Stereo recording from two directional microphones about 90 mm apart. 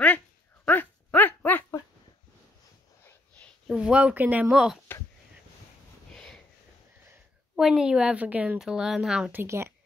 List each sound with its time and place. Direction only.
0.7 s a sound: 20° left (ahead or behind)
3.7 s speech: 10° right (ahead or behind)
4.5 s a woman's voice: 5° right (ahead or behind)
6.1 s sniff: 10° left (ahead or behind)
7.5 s a woman's voice: 5° right (ahead or behind)
9.3 s speech: 25° right (ahead or behind)